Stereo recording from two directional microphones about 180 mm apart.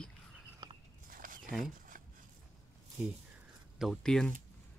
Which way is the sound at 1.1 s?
50° right (ahead or behind).